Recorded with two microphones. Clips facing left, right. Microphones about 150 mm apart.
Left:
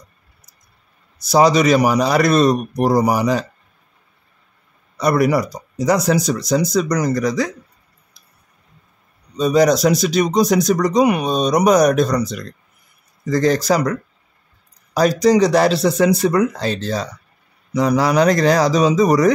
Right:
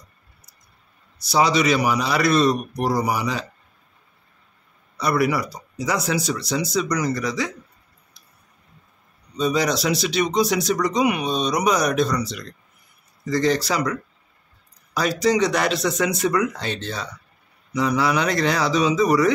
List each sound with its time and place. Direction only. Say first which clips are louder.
1.2 s speech: left 6 dB; 45° left (ahead or behind)
4.9 s speech: left 5 dB; 45° left (ahead or behind)
9.4 s speech: left 7 dB; 45° left (ahead or behind)
15.0 s speech: left 6 dB; 40° left (ahead or behind)